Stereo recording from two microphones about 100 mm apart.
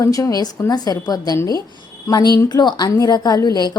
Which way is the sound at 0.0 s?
35° left (ahead or behind).